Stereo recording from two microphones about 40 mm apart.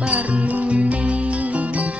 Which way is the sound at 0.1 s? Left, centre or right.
Right.